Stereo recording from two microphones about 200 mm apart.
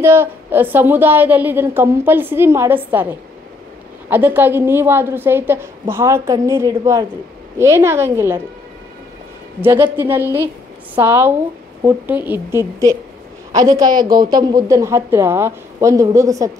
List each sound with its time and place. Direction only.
0.0 s a woman's voice: 10° right (ahead or behind)
9.6 s a woman's voice: 10° right (ahead or behind)